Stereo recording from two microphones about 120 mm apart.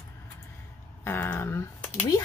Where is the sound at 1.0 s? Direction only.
15° left (ahead or behind).